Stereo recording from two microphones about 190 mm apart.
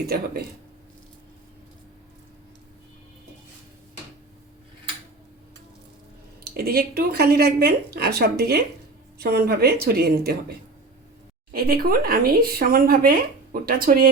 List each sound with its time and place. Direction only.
6.4 s speech: 55° right (ahead or behind)
11.5 s speech: 50° right (ahead or behind)